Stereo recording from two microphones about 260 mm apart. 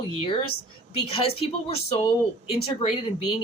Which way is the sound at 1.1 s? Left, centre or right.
Left.